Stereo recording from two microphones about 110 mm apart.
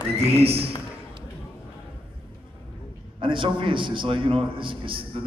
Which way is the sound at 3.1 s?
50° right (ahead or behind).